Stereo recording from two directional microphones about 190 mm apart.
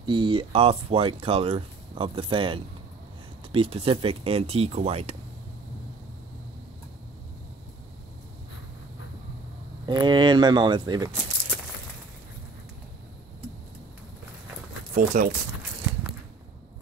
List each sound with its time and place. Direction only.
0.0 s speech: 25° right (ahead or behind)
9.8 s speech: 25° right (ahead or behind)
15.0 s speech: 45° right (ahead or behind)